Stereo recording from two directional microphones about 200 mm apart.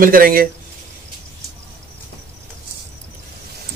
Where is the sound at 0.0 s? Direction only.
45° right (ahead or behind).